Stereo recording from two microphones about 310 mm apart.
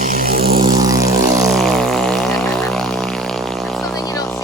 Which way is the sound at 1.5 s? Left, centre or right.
Centre.